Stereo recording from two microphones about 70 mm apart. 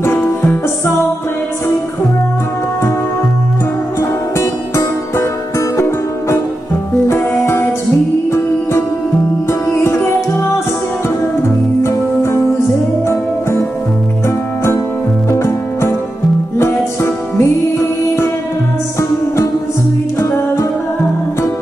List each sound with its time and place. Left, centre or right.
0.0 s music: left
4.4 s music: left
7.2 s music: left
9.5 s music: left
11.8 s music: left
15.3 s music: left
18.9 s music: left